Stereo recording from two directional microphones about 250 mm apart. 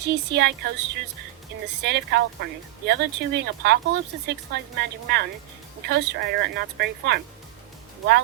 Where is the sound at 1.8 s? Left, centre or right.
Right.